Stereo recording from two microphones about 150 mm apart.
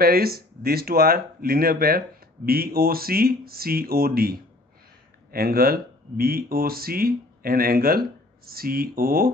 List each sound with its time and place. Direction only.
0.0 s speech: 90° right